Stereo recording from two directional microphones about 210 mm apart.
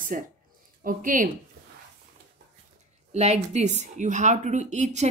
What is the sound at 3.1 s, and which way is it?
A woman's voice, 30° right (ahead or behind).